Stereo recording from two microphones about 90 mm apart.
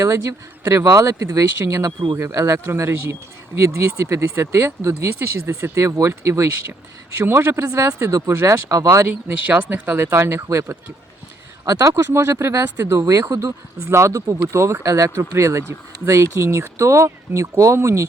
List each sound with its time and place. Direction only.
0.0 s speech: 35° right (ahead or behind)
9.2 s speech: 20° right (ahead or behind); by 18.0 s 35° right (ahead or behind)